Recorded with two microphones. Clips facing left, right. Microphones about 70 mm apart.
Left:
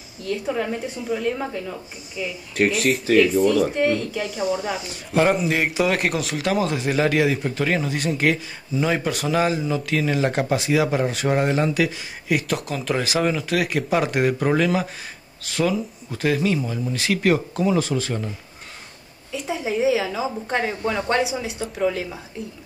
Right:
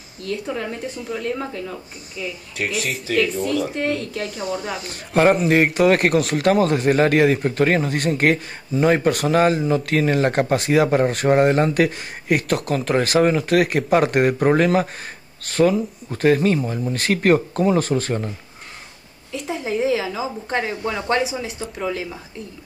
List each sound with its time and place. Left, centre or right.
0.5 s a woman's voice: centre
2.5 s speech: left
3.8 s speech: centre
4.8 s speech: right
19.3 s a woman's voice: centre